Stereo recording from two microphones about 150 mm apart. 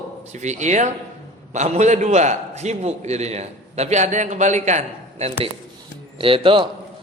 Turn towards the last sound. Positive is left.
turn(degrees=-35)  # may be behind; listen again after turning